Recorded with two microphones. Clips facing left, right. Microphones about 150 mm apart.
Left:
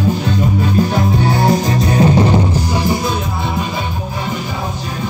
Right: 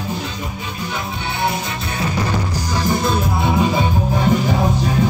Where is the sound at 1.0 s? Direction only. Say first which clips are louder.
Left 9 dB; 40° left (ahead or behind).